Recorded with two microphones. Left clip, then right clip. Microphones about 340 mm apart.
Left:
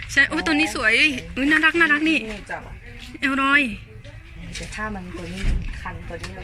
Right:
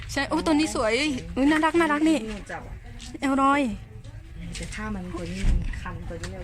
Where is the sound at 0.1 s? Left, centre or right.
Centre.